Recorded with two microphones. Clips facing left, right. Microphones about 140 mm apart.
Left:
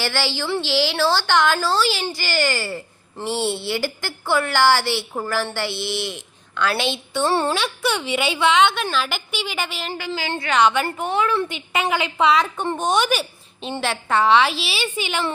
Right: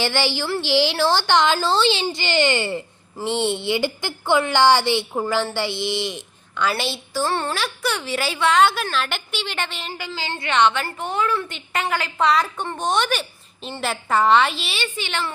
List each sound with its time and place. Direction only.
0.0 s a woman's voice: 15° right (ahead or behind)
7.3 s a woman's voice: 15° left (ahead or behind)
7.6 s a woman's voice: centre (ahead or behind)